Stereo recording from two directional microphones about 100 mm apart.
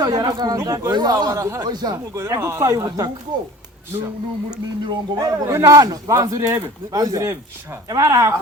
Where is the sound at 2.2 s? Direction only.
30° right (ahead or behind).